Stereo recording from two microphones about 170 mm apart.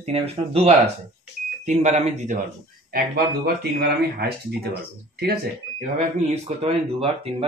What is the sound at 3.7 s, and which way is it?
Speech, 70° right (ahead or behind).